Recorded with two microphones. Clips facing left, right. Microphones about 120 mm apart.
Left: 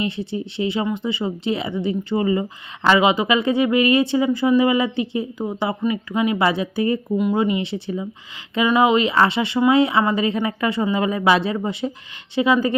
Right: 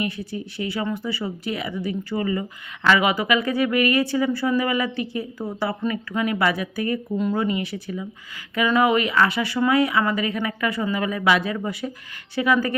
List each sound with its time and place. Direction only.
0.0 s speech: 25° left (ahead or behind)